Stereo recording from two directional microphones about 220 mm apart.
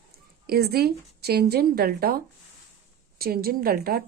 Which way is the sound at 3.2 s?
45° right (ahead or behind).